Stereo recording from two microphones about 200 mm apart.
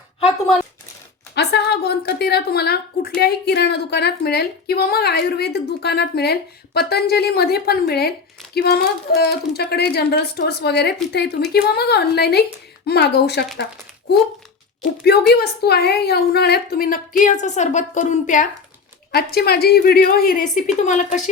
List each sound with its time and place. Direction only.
1.4 s a sound: 55° left (ahead or behind)
3.2 s a woman's voice: 55° left (ahead or behind)
14.8 s speech: 55° left (ahead or behind)
19.1 s speech: 50° left (ahead or behind)